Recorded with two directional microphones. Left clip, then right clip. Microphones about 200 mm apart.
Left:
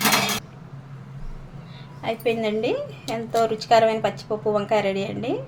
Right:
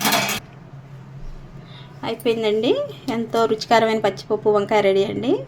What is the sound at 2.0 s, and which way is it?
A woman's voice, 50° right (ahead or behind).